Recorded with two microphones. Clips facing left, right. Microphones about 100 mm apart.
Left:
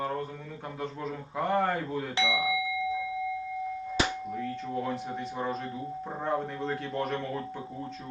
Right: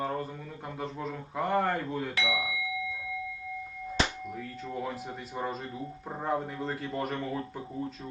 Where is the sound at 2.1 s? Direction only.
25° left (ahead or behind).